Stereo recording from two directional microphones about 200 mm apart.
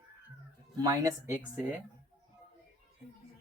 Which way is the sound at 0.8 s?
15° right (ahead or behind).